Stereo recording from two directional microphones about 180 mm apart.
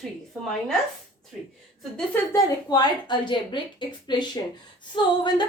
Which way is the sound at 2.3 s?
20° left (ahead or behind).